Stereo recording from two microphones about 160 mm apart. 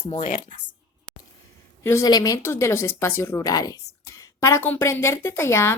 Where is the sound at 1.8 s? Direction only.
15° left (ahead or behind).